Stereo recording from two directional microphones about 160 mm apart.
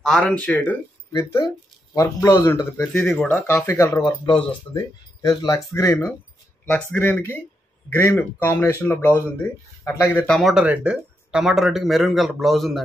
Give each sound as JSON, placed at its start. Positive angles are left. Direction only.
{"t": 0.0, "sound": "speech", "side_deg": 5}
{"t": 4.0, "sound": "speech", "side_deg": 30}
{"t": 10.5, "sound": "speech", "side_deg": -5}